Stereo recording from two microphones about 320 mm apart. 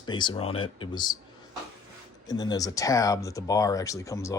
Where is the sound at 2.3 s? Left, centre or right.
Centre.